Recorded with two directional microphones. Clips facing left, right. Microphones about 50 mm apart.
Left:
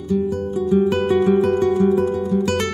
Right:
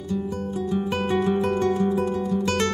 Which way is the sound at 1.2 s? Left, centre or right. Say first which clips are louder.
Left 6 dB; centre.